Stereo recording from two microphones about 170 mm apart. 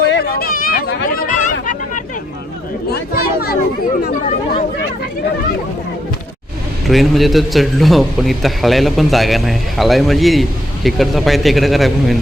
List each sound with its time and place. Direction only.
0.1 s a sound: 60° left (ahead or behind)
2.9 s chatter: 65° left (ahead or behind)
6.8 s a man's voice: centre (ahead or behind)